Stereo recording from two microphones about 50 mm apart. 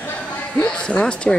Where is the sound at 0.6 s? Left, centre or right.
Centre.